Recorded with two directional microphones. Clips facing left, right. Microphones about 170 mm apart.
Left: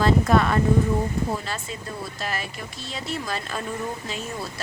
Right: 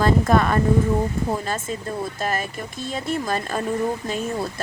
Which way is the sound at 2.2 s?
45° right (ahead or behind).